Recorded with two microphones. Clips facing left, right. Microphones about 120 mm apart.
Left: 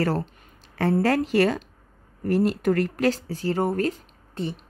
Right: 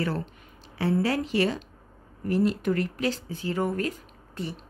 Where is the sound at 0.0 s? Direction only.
40° left (ahead or behind).